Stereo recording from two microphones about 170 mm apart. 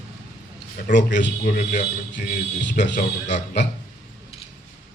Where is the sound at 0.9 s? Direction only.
90° left.